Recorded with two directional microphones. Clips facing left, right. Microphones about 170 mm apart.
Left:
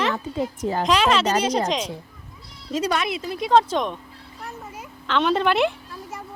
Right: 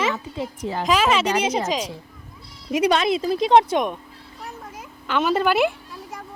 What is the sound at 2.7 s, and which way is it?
Speech, 15° right (ahead or behind).